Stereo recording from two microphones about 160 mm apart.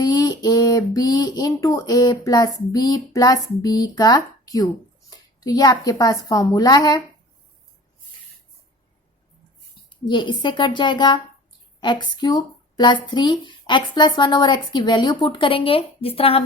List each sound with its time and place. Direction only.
0.0 s speech: 25° left (ahead or behind)
9.9 s speech: 30° left (ahead or behind)